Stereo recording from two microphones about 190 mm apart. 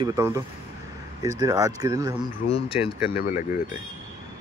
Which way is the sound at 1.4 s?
20° right (ahead or behind).